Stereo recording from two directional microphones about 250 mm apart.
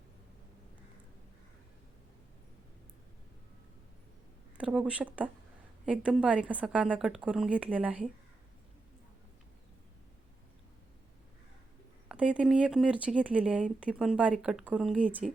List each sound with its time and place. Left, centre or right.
4.5 s a woman's voice: centre
12.0 s a woman's voice: centre